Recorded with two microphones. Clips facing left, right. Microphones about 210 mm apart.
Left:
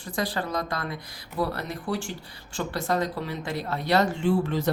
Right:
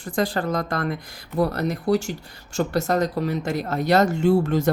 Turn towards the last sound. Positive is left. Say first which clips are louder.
# right 5 dB
turn(degrees=-45)  # may be behind; listen again after turning